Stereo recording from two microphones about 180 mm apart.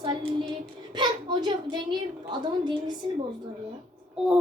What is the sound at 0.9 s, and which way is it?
A woman's voice, 25° right (ahead or behind).